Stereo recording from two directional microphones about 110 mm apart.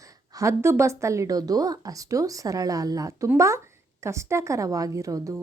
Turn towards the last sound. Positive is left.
turn(degrees=-30)  # may be behind; listen again after turning